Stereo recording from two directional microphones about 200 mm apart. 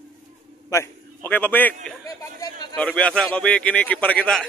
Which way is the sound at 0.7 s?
15° left (ahead or behind).